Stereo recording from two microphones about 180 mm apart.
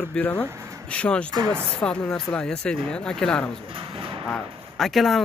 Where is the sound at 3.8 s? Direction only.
30° right (ahead or behind).